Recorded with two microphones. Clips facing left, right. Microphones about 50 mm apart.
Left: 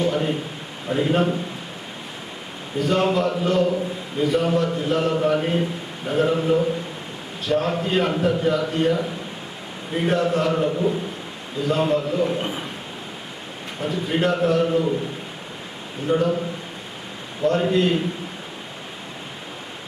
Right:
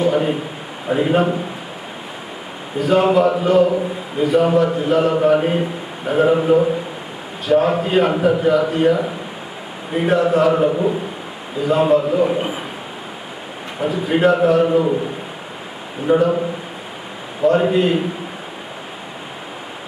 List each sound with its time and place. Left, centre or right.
0.0 s a sound: centre
0.9 s a man's voice: centre
2.7 s a man's voice: centre
10.7 s a man's voice: right
11.6 s a man's voice: centre
13.7 s a man's voice: centre
16.0 s a man's voice: centre
17.4 s a man's voice: centre